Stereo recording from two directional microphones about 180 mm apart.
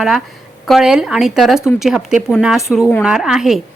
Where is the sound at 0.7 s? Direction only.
5° right (ahead or behind).